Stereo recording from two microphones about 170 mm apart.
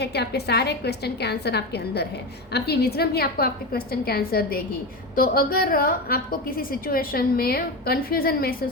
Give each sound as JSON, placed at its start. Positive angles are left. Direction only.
{"t": 0.0, "sound": "a woman's voice", "side_deg": 75}